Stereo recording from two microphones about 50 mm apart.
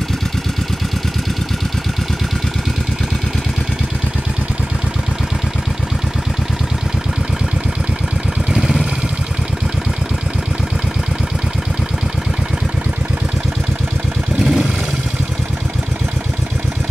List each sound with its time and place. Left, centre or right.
8.5 s vehicle: centre
14.4 s vehicle: centre